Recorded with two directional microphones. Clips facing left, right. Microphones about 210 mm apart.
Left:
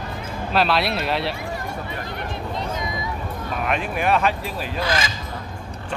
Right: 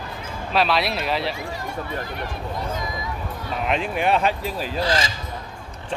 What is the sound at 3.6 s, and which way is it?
Speech, 25° right (ahead or behind).